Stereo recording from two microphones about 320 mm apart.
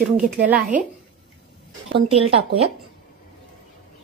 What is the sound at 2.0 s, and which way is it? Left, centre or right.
Speech, centre.